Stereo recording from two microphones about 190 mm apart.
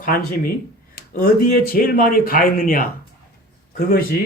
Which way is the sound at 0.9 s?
50° left (ahead or behind).